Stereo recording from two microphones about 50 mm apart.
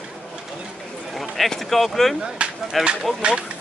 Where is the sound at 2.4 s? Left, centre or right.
Right.